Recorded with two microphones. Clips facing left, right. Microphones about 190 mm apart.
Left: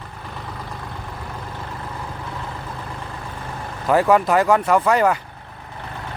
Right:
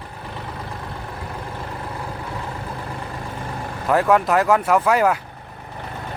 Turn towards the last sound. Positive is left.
turn(degrees=-5)  # may be behind; listen again after turning